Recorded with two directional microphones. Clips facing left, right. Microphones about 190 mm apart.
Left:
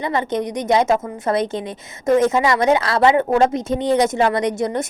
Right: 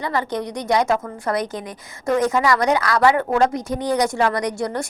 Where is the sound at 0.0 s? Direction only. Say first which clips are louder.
Left 3 dB; 20° left (ahead or behind).